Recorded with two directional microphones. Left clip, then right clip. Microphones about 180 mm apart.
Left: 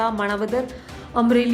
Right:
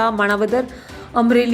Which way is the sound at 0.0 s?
15° right (ahead or behind).